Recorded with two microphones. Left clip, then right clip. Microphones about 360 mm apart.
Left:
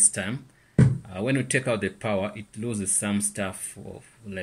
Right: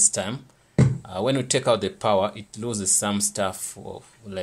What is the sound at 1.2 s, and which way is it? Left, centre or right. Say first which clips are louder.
Speech: right 3 dB; centre.